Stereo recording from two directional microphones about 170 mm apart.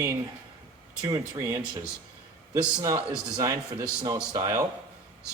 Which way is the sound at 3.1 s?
20° right (ahead or behind).